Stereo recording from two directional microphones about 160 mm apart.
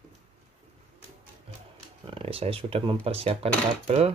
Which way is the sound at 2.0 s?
35° right (ahead or behind).